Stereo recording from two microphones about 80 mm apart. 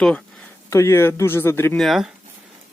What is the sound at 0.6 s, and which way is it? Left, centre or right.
A man's voice, left.